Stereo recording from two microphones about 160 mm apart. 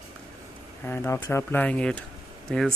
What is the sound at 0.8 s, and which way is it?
Speech, 15° left (ahead or behind).